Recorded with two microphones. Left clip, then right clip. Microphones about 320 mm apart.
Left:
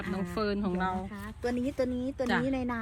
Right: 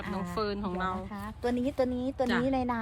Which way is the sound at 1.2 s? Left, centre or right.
Right.